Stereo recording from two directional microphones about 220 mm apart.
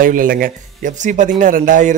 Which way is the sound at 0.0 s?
40° right (ahead or behind).